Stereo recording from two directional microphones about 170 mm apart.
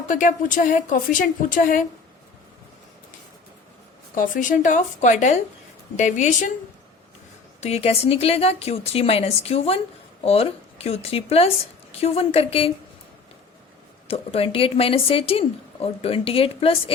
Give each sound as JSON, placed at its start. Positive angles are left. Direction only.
{"t": 0.1, "sound": "a woman's voice", "side_deg": 50}
{"t": 4.1, "sound": "a woman's voice", "side_deg": 50}
{"t": 7.6, "sound": "a woman's voice", "side_deg": 40}
{"t": 14.1, "sound": "a woman's voice", "side_deg": 35}